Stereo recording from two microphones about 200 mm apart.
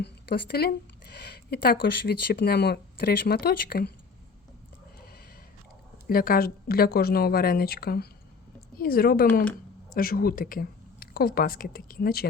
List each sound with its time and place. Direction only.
0.0 s speech: 55° left (ahead or behind)
6.1 s speech: 45° left (ahead or behind)